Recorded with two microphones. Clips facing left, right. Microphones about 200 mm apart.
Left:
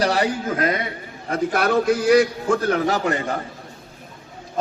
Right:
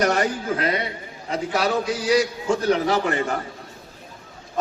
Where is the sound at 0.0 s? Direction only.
35° left (ahead or behind).